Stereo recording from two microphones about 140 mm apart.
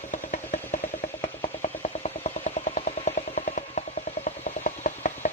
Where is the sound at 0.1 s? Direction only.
55° left (ahead or behind).